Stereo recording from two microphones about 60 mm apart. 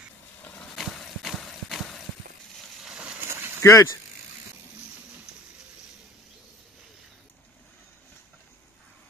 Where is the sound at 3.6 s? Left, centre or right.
Left.